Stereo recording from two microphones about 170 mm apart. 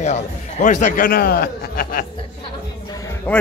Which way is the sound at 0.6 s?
45° left (ahead or behind).